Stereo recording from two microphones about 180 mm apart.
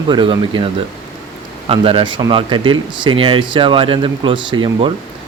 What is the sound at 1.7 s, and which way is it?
Speech, 30° right (ahead or behind).